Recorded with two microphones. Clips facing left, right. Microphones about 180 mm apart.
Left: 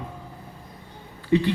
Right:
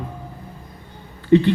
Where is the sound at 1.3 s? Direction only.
60° right (ahead or behind).